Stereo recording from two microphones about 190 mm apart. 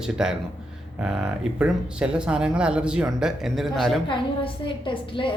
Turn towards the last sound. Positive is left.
turn(degrees=25)  # may be behind; listen again after turning